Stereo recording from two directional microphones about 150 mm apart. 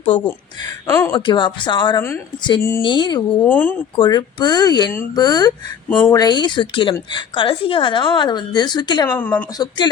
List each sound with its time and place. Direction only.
0.1 s a woman's voice: 35° left (ahead or behind)
0.6 s speech: 20° left (ahead or behind)
1.1 s a woman's voice: 30° left (ahead or behind)
2.0 s speech: 15° left (ahead or behind)
2.8 s a woman's voice: 30° left (ahead or behind)
3.4 s speech: 10° left (ahead or behind)
3.9 s a woman's voice: 30° left (ahead or behind)
9.0 s speech: 10° left (ahead or behind)
9.6 s a woman's voice: 30° left (ahead or behind)